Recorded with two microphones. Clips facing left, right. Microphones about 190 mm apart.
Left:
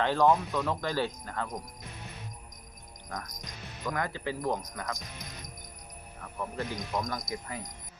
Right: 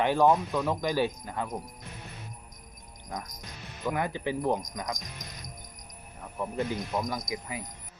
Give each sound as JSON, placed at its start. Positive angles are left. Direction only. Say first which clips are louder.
{"t": 0.0, "sound": "speech", "louder": "right 2 dB", "side_deg": -15}
{"t": 3.1, "sound": "speech", "louder": "right 2 dB", "side_deg": -10}
{"t": 6.2, "sound": "speech", "louder": "right 4 dB", "side_deg": -15}